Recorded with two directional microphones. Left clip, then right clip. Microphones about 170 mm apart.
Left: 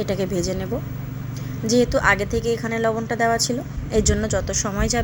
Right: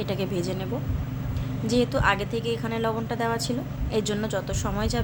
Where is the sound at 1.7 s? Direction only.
20° left (ahead or behind).